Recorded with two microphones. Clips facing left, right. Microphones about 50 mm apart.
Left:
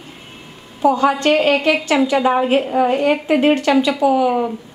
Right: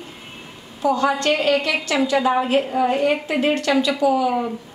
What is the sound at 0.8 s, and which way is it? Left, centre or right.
A woman's voice, left.